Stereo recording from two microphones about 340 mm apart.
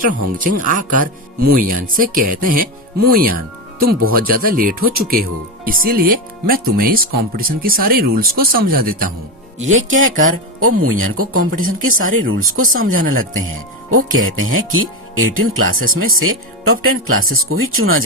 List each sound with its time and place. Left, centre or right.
0.0 s speech: right
9.6 s speech: right